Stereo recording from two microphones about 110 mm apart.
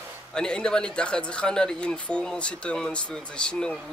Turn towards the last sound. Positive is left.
turn(degrees=10)  # may be behind; listen again after turning